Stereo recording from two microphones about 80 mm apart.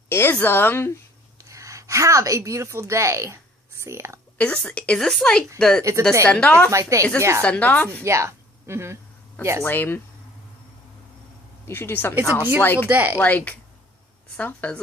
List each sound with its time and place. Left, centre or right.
0.1 s a woman's voice: left
1.4 s a woman's voice: right
4.4 s a woman's voice: centre
6.7 s speech: right
7.4 s speech: centre
8.0 s speech: right
9.6 s speech: left
11.6 s speech: left
12.4 s speech: right
12.6 s speech: left
12.9 s speech: right
13.2 s speech: centre